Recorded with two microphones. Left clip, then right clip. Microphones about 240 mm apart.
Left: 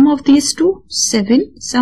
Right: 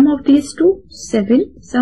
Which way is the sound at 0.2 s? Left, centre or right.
Left.